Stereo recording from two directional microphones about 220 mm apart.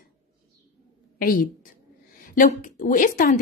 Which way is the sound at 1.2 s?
40° left (ahead or behind).